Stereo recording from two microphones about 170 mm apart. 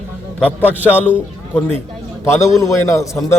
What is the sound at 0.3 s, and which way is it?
Speech, 5° left (ahead or behind).